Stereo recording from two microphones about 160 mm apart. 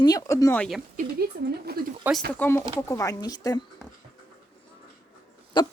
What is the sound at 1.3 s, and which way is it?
Speech, 80° right.